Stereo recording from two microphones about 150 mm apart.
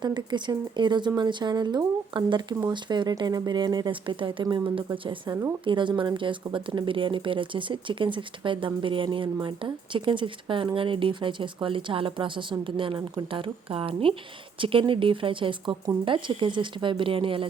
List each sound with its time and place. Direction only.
0.0 s speech: 30° right (ahead or behind)